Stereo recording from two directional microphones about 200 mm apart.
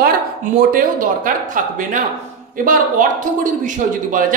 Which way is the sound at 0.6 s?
45° right (ahead or behind).